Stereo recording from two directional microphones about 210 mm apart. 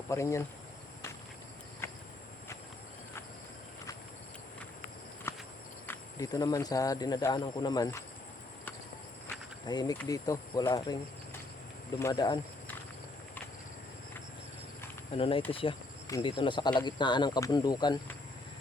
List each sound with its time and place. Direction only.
0.1 s speech: 15° left (ahead or behind)
1.8 s cricket: 10° left (ahead or behind)
5.3 s horse: 10° left (ahead or behind)
5.8 s speech: 15° left (ahead or behind)
9.2 s speech: 20° left (ahead or behind)
12.1 s speech: 20° left (ahead or behind)
15.1 s speech: 25° left (ahead or behind)